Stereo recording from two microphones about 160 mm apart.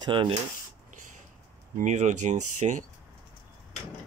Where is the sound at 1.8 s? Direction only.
50° right (ahead or behind).